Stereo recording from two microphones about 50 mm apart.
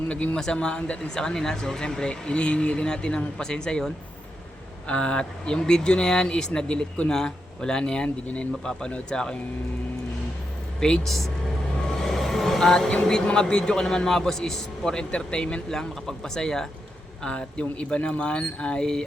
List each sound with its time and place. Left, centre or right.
0.1 s speech: left
1.1 s speech: centre
4.9 s speech: left
10.8 s speech: centre
11.0 s speech: centre
11.9 s vehicle: centre
12.9 s speech: centre
15.7 s speech: centre
17.2 s speech: left